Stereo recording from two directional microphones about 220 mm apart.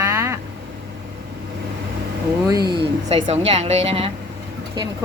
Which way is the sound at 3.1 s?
25° right (ahead or behind).